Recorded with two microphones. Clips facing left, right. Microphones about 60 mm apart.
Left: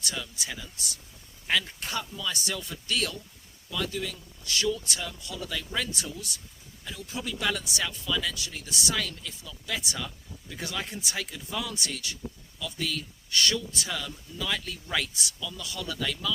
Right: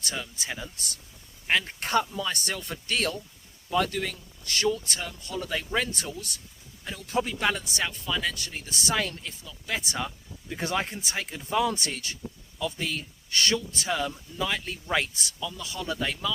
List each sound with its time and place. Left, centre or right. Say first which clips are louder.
0.0 s a man's voice: right 1 dB; right
15.4 s speech: right 4 dB; right